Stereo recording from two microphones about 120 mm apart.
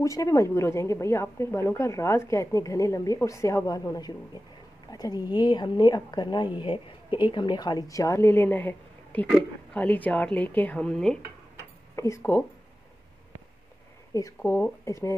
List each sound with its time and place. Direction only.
0.0 s a woman's voice: 25° left (ahead or behind); by 11.1 s 5° left (ahead or behind)
11.9 s speech: 25° left (ahead or behind)
14.1 s speech: 30° left (ahead or behind)